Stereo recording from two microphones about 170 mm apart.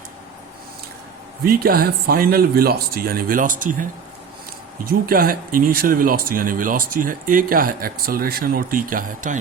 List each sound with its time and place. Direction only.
1.5 s speech: 60° right (ahead or behind)
4.9 s speech: 60° right (ahead or behind)